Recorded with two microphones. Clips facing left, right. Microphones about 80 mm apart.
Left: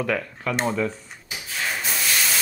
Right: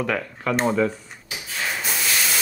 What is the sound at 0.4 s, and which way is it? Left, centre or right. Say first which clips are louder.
Speech: right 6 dB; centre.